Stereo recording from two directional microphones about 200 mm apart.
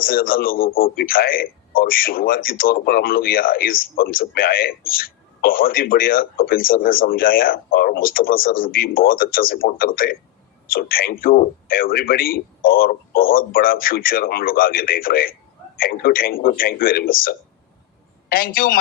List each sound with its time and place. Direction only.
0.0 s a man's voice: 45° left (ahead or behind)